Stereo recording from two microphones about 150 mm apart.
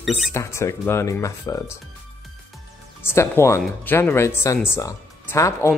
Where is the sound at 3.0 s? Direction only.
15° left (ahead or behind).